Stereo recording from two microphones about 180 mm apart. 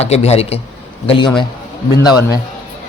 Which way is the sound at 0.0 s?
35° left (ahead or behind).